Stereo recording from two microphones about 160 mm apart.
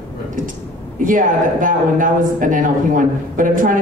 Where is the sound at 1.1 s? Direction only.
55° right (ahead or behind).